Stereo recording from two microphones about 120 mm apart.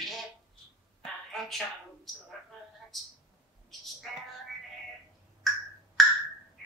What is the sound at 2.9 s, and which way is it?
Speech, centre (ahead or behind).